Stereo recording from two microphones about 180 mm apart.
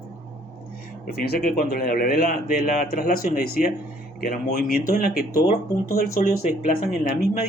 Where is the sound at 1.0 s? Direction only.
55° left (ahead or behind).